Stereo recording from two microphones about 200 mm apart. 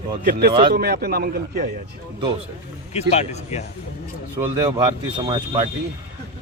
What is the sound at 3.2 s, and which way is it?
Speech, 35° left (ahead or behind).